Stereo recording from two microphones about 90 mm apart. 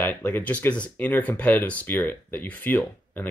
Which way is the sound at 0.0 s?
20° left (ahead or behind).